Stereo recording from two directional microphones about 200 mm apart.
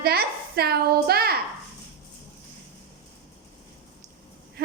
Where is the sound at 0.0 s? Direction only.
50° right (ahead or behind).